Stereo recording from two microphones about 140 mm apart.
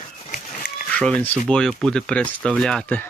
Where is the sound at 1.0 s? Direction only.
10° left (ahead or behind).